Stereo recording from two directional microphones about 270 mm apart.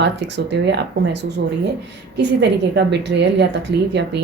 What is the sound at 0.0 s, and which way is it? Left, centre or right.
Speech, right.